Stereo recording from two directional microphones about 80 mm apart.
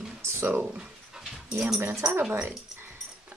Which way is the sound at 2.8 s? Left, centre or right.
Right.